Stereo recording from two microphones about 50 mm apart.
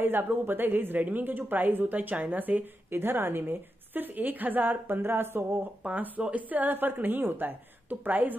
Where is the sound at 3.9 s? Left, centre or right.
Right.